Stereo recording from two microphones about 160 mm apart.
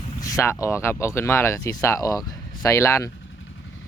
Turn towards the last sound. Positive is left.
turn(degrees=15)  # may be behind; listen again after turning